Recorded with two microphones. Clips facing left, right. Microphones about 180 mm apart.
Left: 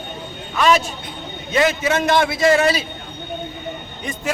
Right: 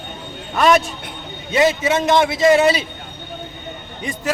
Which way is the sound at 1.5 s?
25° right (ahead or behind).